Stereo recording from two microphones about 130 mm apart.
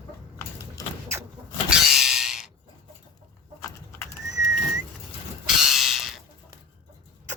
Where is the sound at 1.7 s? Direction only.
5° right (ahead or behind).